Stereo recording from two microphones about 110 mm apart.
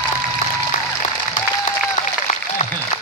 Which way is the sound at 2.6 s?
90° left.